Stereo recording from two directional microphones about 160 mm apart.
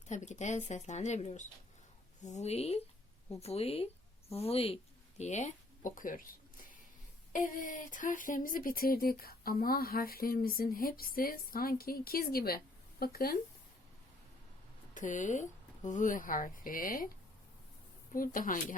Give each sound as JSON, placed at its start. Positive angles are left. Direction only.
{"t": 0.1, "sound": "speech", "side_deg": 45}
{"t": 7.3, "sound": "speech", "side_deg": 55}
{"t": 14.9, "sound": "speech", "side_deg": 50}
{"t": 18.1, "sound": "speech", "side_deg": 60}